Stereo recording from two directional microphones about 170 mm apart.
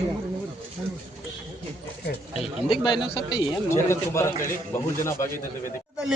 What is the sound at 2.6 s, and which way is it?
A man's voice, 35° left (ahead or behind).